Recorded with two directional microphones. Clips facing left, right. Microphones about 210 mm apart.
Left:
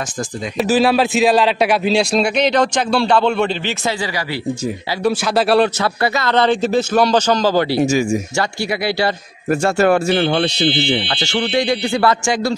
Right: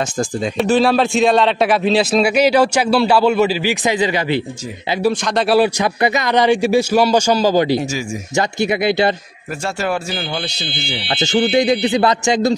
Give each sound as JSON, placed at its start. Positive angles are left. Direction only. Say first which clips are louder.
{"t": 0.6, "sound": "a man's voice", "louder": "even", "side_deg": 5}
{"t": 3.8, "sound": "a man's voice", "louder": "right 5 dB", "side_deg": -20}
{"t": 5.1, "sound": "a man's voice", "louder": "left 1 dB", "side_deg": 5}
{"t": 5.6, "sound": "a man's voice", "louder": "right 1 dB", "side_deg": -15}
{"t": 9.5, "sound": "speech", "louder": "left 7 dB", "side_deg": 55}
{"t": 11.1, "sound": "a man's voice", "louder": "right 4 dB", "side_deg": -20}